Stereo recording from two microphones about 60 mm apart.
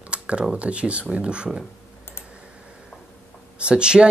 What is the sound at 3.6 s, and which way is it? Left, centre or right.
Speech, centre.